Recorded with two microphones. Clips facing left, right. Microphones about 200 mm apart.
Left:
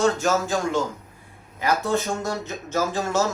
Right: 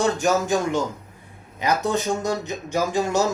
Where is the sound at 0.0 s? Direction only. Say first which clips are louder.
Even; 15° right (ahead or behind).